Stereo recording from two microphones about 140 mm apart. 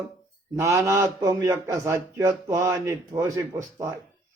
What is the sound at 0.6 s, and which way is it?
Speech, 20° right (ahead or behind).